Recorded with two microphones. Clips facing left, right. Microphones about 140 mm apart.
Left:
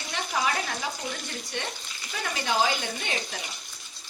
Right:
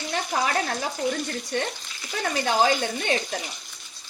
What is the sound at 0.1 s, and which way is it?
Frying, 50° right (ahead or behind).